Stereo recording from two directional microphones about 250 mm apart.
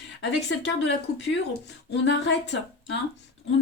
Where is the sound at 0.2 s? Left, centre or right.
Left.